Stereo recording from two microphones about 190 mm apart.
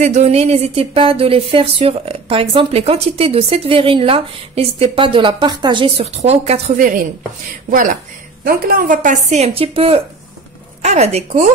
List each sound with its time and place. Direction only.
0.0 s speech: 35° right (ahead or behind)
7.7 s a woman's voice: 45° right (ahead or behind)